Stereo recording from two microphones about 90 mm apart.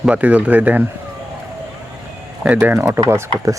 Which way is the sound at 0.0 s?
15° right (ahead or behind).